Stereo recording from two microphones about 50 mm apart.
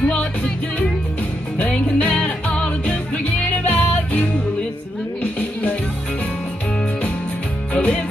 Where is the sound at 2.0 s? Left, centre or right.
Left.